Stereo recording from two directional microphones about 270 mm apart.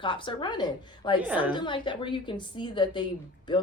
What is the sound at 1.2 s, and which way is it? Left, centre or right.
Speech, centre.